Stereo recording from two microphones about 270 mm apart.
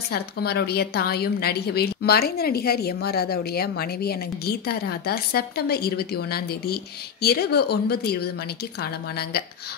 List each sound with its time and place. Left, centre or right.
0.1 s a woman's voice: left